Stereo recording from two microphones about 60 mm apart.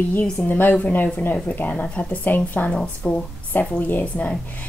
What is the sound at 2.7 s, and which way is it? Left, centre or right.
Speech, centre.